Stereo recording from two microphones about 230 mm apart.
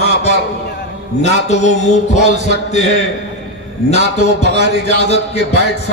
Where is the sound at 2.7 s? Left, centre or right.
Left.